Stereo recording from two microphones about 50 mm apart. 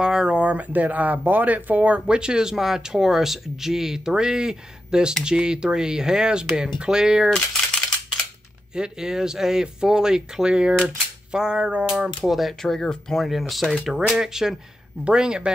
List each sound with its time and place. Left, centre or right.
0.0 s speech: centre
8.7 s speech: centre
12.2 s speech: centre
12.7 s speech: centre
13.1 s speech: centre